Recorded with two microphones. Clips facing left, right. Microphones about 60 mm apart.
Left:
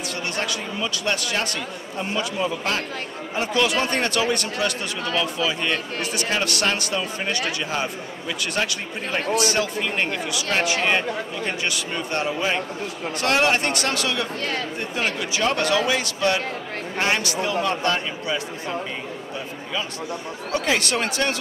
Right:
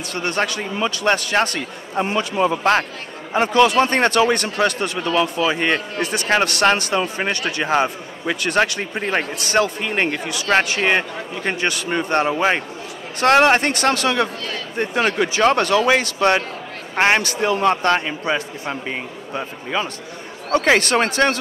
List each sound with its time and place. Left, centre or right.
0.1 s speech: right